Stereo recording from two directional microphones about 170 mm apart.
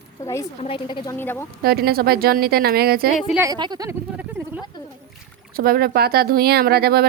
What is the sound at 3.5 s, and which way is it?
Speech, 25° right (ahead or behind).